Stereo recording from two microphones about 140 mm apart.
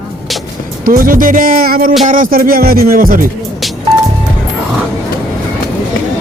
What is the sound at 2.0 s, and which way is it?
Music, 70° right (ahead or behind).